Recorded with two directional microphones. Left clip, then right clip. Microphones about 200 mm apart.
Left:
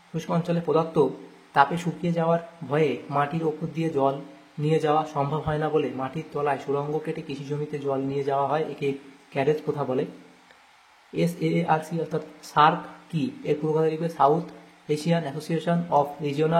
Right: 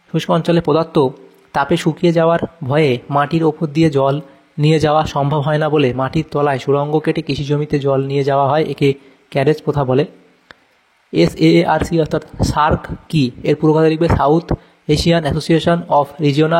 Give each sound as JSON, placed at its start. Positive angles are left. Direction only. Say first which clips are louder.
{"t": 0.1, "sound": "speech", "louder": "right 13 dB", "side_deg": -45}
{"t": 11.1, "sound": "speech", "louder": "right 14 dB", "side_deg": -45}